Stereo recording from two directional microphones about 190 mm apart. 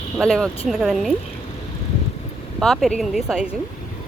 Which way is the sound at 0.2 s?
5° left (ahead or behind).